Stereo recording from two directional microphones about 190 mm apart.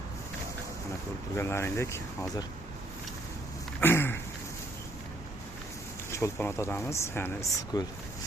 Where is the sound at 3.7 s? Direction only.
10° left (ahead or behind).